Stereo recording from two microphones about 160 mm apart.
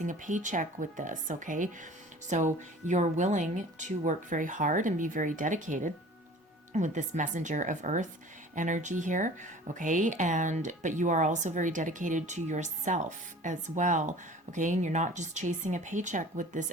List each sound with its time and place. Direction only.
0.0 s a woman's voice: 55° right (ahead or behind)